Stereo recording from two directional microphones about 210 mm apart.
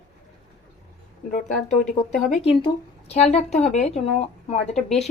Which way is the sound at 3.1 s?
30° left (ahead or behind).